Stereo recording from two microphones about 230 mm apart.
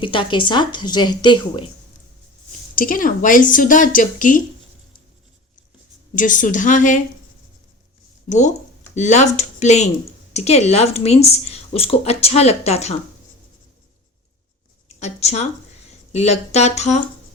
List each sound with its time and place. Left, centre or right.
0.0 s a woman's voice: left
2.7 s a woman's voice: left
6.1 s a woman's voice: left
8.3 s a woman's voice: left
14.8 s a sound: left
16.1 s a woman's voice: left